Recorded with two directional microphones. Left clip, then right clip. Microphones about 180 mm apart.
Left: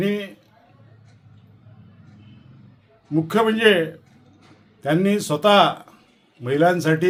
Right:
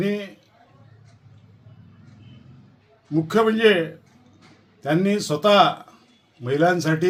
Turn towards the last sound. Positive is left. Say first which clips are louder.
# left 2 dB
turn(degrees=15)  # may be behind; listen again after turning